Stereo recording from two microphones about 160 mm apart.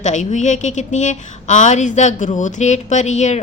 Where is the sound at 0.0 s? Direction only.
50° left (ahead or behind).